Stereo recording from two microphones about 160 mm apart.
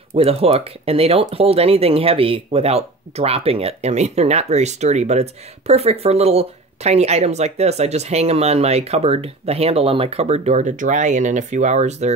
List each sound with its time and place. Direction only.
0.1 s speech: 40° right (ahead or behind)